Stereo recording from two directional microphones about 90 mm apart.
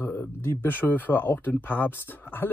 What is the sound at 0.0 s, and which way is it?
Speech, 20° left (ahead or behind).